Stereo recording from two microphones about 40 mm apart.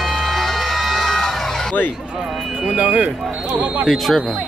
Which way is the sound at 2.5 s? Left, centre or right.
Right.